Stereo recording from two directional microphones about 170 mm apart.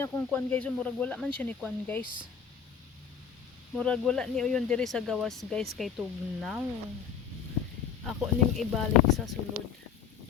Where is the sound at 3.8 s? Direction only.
5° left (ahead or behind).